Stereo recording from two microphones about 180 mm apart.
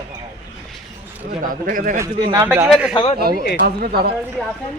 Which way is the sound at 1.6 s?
50° right (ahead or behind).